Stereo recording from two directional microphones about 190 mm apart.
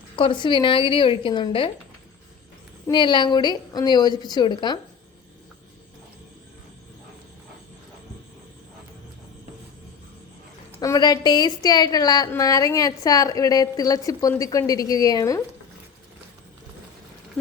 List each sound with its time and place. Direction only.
0.2 s a woman's voice: 25° left (ahead or behind)
2.8 s a woman's voice: 25° left (ahead or behind)
10.8 s a woman's voice: 20° left (ahead or behind)